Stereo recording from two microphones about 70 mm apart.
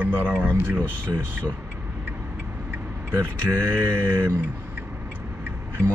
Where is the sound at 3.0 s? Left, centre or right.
Right.